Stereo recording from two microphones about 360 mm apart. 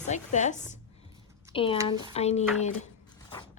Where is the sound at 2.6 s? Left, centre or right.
Centre.